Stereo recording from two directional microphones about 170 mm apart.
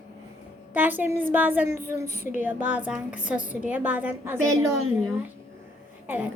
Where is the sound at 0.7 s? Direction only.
10° right (ahead or behind).